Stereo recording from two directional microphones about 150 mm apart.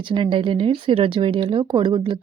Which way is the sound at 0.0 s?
35° right (ahead or behind).